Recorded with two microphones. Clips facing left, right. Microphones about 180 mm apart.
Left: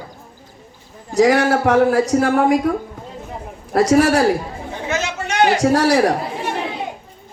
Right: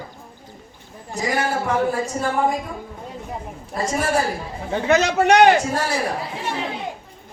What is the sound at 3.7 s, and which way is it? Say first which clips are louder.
Speech: left 8 dB; 80° left.